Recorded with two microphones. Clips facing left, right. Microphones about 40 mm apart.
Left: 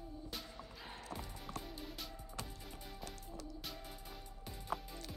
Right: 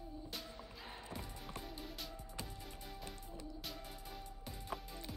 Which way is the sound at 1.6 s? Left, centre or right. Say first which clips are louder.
Even; centre.